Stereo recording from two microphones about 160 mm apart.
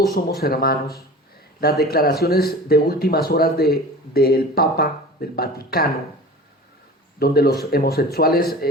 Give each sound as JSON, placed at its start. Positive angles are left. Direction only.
{"t": 0.1, "sound": "speech", "side_deg": 75}
{"t": 7.2, "sound": "speech", "side_deg": 75}